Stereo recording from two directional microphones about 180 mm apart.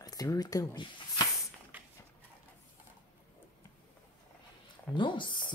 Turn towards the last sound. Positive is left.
turn(degrees=25)  # may be behind; listen again after turning